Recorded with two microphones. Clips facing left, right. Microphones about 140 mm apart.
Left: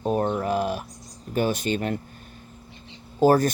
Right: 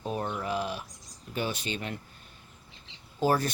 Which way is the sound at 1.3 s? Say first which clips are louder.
Left 9 dB; 45° left (ahead or behind).